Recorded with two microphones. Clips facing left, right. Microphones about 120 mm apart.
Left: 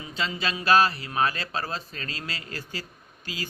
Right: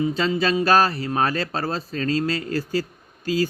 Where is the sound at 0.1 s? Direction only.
40° right (ahead or behind).